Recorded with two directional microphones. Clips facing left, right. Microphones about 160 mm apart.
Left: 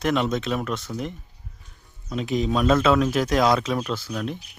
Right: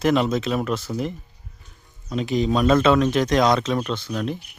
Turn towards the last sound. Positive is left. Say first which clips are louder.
# right 2 dB
turn(degrees=0)  # may be behind; listen again after turning